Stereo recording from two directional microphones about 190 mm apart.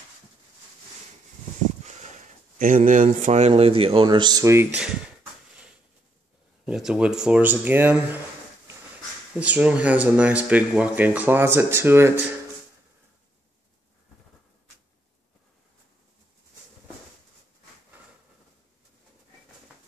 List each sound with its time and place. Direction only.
2.6 s a man's voice: 45° right (ahead or behind); by 4.9 s 10° right (ahead or behind)
6.6 s speech: 5° right (ahead or behind)
9.4 s speech: 10° right (ahead or behind)